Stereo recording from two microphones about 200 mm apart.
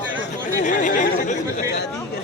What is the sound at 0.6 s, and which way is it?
Speech, 40° left (ahead or behind).